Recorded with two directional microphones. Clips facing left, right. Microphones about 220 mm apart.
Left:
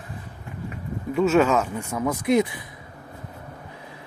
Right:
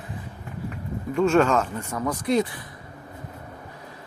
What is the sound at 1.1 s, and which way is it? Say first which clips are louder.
Speech: left 1 dB; 5° left (ahead or behind).